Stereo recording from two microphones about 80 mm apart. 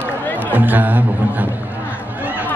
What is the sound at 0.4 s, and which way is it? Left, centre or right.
A man's voice, right.